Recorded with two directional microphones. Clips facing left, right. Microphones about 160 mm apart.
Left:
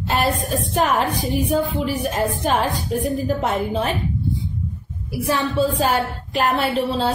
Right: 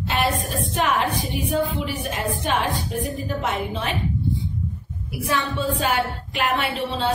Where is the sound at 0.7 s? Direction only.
40° left (ahead or behind).